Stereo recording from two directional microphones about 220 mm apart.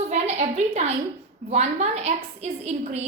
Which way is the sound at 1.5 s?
30° right (ahead or behind).